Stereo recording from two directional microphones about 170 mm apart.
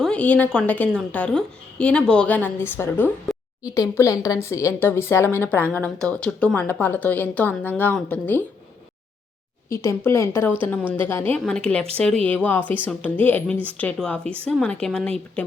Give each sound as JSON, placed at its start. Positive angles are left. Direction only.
{"t": 0.0, "sound": "a woman's voice", "side_deg": 5}
{"t": 9.6, "sound": "a woman's voice", "side_deg": 15}